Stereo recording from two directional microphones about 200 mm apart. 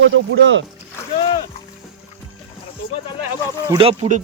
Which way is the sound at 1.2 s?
25° left (ahead or behind).